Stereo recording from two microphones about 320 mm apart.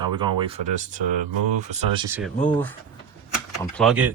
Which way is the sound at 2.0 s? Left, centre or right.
Centre.